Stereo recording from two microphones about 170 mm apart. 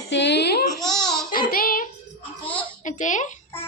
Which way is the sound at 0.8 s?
5° left (ahead or behind).